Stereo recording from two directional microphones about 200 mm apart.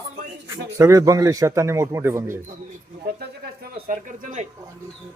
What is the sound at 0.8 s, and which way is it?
A man's voice, 15° right (ahead or behind).